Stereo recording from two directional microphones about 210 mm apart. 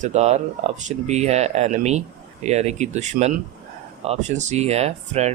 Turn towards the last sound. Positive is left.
turn(degrees=-30)  # may be behind; listen again after turning